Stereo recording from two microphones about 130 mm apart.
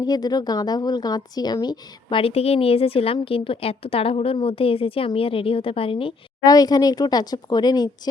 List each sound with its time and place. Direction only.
0.0 s a woman's voice: 30° left (ahead or behind)
6.4 s speech: 30° left (ahead or behind)